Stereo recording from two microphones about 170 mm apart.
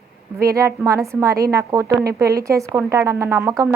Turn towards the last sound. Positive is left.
turn(degrees=-15)  # may be behind; listen again after turning